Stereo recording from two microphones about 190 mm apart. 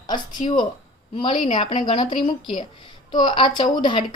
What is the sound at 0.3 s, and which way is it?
Speech, 20° left (ahead or behind).